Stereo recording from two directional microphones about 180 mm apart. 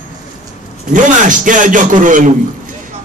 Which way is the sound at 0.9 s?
45° right (ahead or behind).